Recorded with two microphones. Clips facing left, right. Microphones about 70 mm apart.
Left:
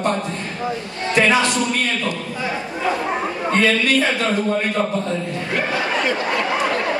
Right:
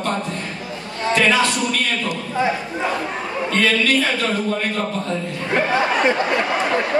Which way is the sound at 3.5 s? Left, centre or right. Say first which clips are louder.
Left 1 dB; left.